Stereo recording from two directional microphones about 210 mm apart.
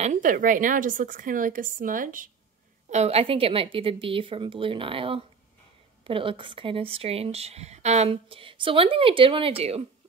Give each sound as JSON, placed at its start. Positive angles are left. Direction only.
{"t": 0.0, "sound": "a woman's voice", "side_deg": -40}
{"t": 2.9, "sound": "speech", "side_deg": -30}